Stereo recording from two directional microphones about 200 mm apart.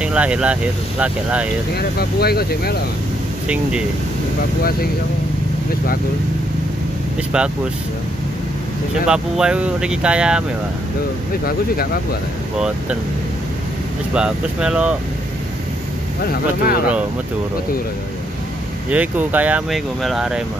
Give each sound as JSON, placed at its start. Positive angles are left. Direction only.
{"t": 0.0, "sound": "speech", "side_deg": -5}
{"t": 1.8, "sound": "speech", "side_deg": 50}
{"t": 7.3, "sound": "speech", "side_deg": -5}
{"t": 9.0, "sound": "speech", "side_deg": -5}
{"t": 11.4, "sound": "speech", "side_deg": 50}
{"t": 14.1, "sound": "speech", "side_deg": -5}
{"t": 16.3, "sound": "speech", "side_deg": 50}
{"t": 18.9, "sound": "speech", "side_deg": -10}